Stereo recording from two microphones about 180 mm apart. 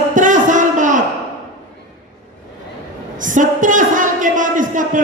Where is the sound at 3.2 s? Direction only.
45° right (ahead or behind).